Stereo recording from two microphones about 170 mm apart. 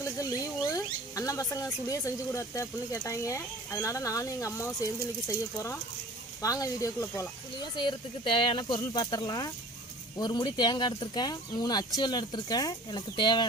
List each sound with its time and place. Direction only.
0.0 s speech: 20° left (ahead or behind)
6.4 s speech: 20° left (ahead or behind)